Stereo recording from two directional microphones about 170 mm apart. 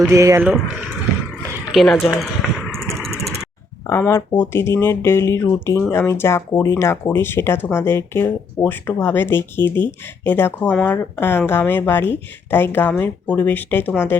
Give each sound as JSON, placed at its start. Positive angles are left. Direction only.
{"t": 0.1, "sound": "speech", "side_deg": -20}
{"t": 1.7, "sound": "a sound", "side_deg": 0}
{"t": 3.8, "sound": "speech", "side_deg": 15}